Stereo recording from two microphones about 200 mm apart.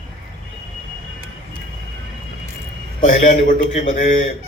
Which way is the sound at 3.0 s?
40° left (ahead or behind).